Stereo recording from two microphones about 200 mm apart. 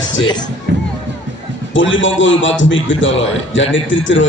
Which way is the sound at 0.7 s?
60° right (ahead or behind).